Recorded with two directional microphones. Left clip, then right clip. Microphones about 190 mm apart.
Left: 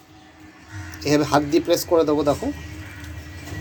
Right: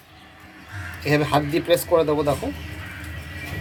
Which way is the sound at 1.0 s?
50° left (ahead or behind).